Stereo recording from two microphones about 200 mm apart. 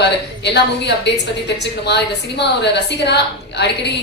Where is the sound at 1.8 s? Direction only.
60° left (ahead or behind).